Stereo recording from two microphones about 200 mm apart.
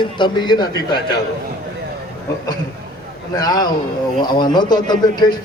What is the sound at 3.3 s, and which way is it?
A man's voice, 20° left (ahead or behind).